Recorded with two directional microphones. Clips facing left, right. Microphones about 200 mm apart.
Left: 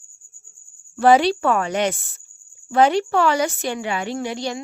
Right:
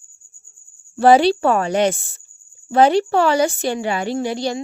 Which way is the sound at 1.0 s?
30° right (ahead or behind).